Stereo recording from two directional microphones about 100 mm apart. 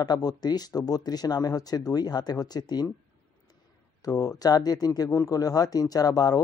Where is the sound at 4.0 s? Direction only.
35° left (ahead or behind).